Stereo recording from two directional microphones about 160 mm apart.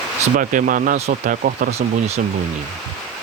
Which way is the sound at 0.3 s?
55° right (ahead or behind).